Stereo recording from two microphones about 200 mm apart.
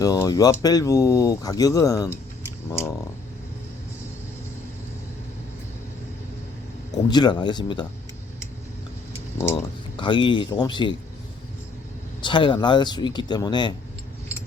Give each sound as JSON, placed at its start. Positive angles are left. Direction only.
{"t": 0.0, "sound": "speech", "side_deg": 20}
{"t": 7.1, "sound": "speech", "side_deg": 20}
{"t": 9.6, "sound": "speech", "side_deg": 25}
{"t": 12.2, "sound": "speech", "side_deg": 25}